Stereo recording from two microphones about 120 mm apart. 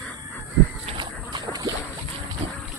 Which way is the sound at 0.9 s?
35° right (ahead or behind).